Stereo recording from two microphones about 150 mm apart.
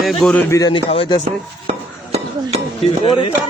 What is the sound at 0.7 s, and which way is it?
Speech, 35° left (ahead or behind).